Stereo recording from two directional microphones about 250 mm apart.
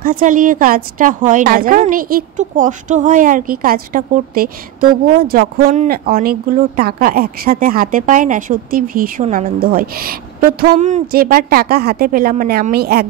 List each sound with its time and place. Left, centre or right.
0.0 s a woman's voice: right